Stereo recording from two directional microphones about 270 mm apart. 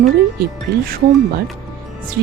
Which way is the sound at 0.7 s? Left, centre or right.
Right.